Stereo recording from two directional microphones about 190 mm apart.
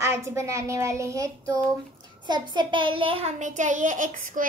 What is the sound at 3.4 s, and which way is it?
A child's voice, 40° right (ahead or behind).